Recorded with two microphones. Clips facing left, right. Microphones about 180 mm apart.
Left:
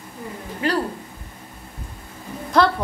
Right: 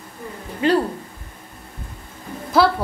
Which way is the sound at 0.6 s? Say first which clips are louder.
Right 5 dB; 25° right (ahead or behind).